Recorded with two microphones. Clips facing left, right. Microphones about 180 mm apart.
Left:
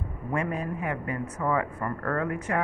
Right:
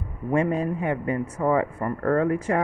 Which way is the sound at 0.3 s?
30° right (ahead or behind).